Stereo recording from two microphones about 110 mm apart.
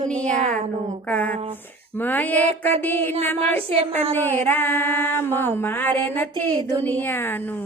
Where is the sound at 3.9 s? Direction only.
65° right (ahead or behind).